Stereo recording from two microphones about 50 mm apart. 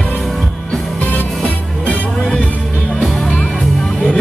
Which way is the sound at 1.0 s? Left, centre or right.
Left.